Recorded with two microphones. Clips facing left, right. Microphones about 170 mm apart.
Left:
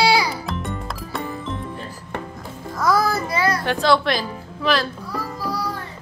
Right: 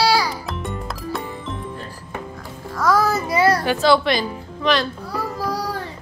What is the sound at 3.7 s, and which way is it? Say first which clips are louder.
A woman's voice: right 2 dB; 5° right (ahead or behind).